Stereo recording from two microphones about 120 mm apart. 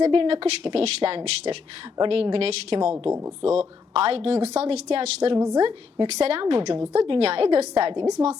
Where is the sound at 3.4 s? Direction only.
55° right (ahead or behind); by 6.8 s 40° right (ahead or behind).